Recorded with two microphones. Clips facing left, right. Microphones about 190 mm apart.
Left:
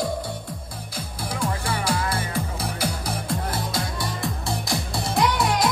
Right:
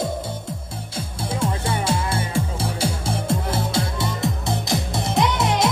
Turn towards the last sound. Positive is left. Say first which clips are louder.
# right 1 dB
turn(degrees=-25)  # may be behind; listen again after turning